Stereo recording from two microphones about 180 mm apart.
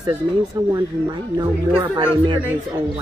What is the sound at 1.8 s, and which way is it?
Speech, 25° right (ahead or behind).